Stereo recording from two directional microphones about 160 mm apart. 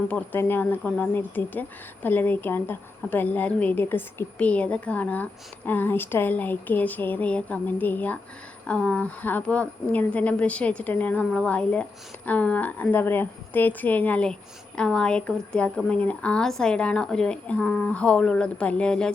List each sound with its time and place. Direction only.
0.1 s a woman's voice: 10° left (ahead or behind)